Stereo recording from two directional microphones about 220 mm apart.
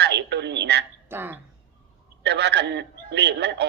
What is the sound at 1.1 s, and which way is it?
Speech, 10° right (ahead or behind).